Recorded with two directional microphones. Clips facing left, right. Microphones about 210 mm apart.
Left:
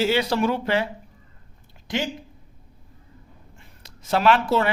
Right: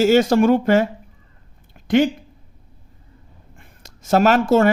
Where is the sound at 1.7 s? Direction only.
55° right (ahead or behind).